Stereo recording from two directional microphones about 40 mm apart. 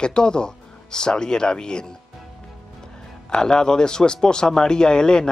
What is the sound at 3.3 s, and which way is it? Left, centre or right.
Speech, left.